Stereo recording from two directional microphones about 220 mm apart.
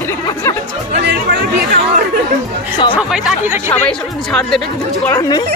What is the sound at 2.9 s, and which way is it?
Speech, 5° right (ahead or behind).